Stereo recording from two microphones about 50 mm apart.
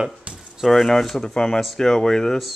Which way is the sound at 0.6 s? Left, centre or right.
Centre.